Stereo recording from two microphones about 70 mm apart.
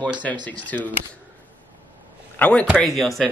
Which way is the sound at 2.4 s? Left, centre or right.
Centre.